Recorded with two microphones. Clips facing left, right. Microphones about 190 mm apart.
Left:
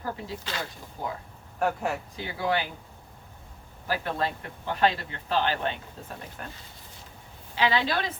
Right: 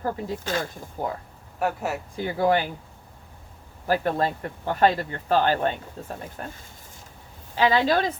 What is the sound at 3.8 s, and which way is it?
Speech, 45° right (ahead or behind).